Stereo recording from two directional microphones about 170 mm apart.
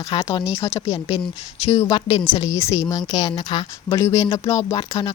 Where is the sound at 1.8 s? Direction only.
30° left (ahead or behind).